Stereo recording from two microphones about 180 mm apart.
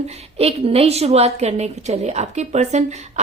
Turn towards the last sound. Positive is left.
turn(degrees=-40)  # may be behind; listen again after turning